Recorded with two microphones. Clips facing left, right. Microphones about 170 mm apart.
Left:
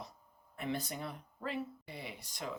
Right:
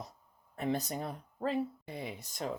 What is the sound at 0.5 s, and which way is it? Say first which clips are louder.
A woman's voice: right 5 dB; 40° right (ahead or behind).